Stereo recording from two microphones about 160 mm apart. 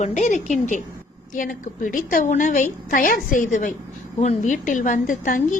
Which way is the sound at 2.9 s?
60° left (ahead or behind).